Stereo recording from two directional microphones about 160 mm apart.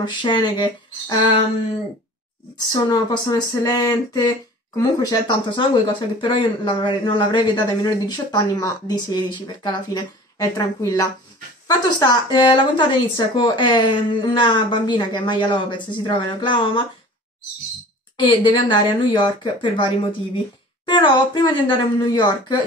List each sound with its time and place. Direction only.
0.0 s speech: 30° left (ahead or behind)
2.7 s speech: 25° left (ahead or behind)
18.2 s speech: 30° left (ahead or behind)